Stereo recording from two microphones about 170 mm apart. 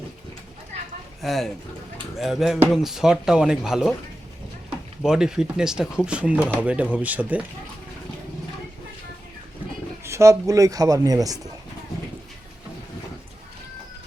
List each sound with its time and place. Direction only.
1.2 s speech: centre (ahead or behind)
5.0 s speech: 5° right (ahead or behind)
10.0 s speech: 15° right (ahead or behind)